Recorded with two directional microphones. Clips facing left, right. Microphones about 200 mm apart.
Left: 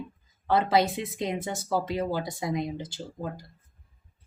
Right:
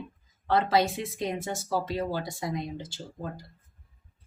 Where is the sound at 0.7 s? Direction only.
20° left (ahead or behind).